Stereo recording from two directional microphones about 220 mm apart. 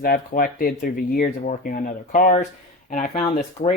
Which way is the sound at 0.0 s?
40° left (ahead or behind).